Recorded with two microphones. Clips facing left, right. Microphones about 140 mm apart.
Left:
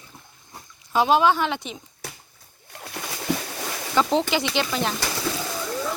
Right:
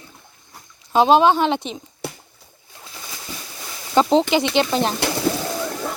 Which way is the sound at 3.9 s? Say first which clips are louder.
Right 6 dB; 25° right (ahead or behind).